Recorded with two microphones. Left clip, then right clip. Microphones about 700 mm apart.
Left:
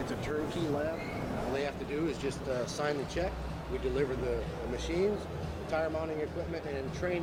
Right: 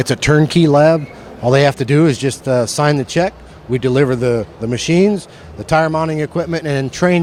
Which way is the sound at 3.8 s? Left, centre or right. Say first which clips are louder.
Right 18 dB; right.